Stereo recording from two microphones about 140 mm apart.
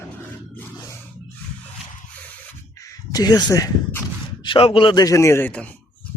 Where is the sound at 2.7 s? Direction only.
25° left (ahead or behind).